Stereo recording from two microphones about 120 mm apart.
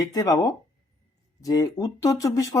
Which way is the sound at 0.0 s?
30° left (ahead or behind).